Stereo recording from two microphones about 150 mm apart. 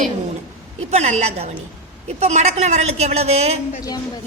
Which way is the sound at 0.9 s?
50° right (ahead or behind).